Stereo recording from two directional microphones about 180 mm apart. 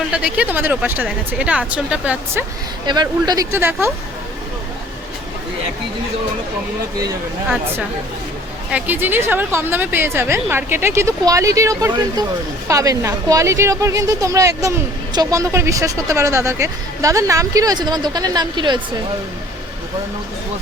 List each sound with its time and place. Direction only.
0.1 s a woman's voice: 5° right (ahead or behind)
2.8 s a woman's voice: 25° right (ahead or behind)
8.7 s a woman's voice: 10° right (ahead or behind)